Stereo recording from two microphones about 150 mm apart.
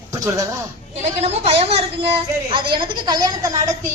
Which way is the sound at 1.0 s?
45° right (ahead or behind).